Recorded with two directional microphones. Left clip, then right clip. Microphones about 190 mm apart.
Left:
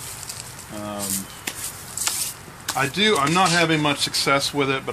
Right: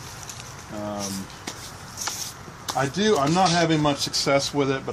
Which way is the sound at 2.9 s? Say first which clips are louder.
Left 3 dB; 30° right (ahead or behind).